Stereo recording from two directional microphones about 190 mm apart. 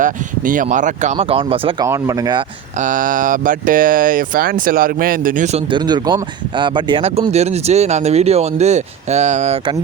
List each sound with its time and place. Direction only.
0.0 s speech: 45° right (ahead or behind); by 1.7 s 30° right (ahead or behind)
1.8 s speech: 15° right (ahead or behind)
2.7 s speech: 45° right (ahead or behind)